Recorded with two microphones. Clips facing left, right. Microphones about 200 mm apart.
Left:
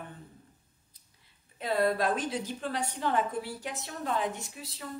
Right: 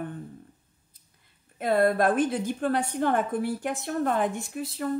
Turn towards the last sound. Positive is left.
turn(degrees=-55)  # may be behind; listen again after turning